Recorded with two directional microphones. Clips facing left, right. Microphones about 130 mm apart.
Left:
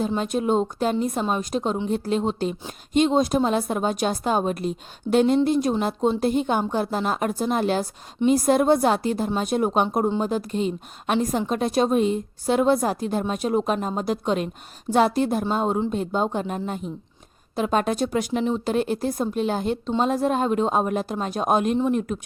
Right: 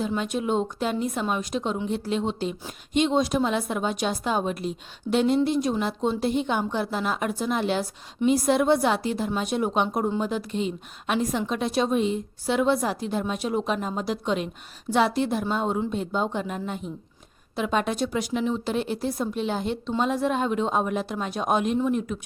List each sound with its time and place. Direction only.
0.2 s speech: 40° left (ahead or behind)